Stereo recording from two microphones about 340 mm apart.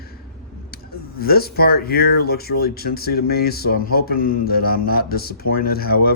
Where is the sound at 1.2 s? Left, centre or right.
Left.